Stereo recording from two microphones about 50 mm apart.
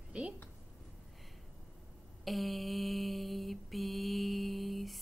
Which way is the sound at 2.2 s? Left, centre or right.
Centre.